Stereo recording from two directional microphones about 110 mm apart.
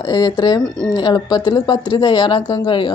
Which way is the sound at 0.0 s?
40° left (ahead or behind).